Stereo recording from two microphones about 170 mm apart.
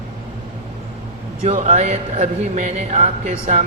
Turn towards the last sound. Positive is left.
turn(degrees=-40)  # may be behind; listen again after turning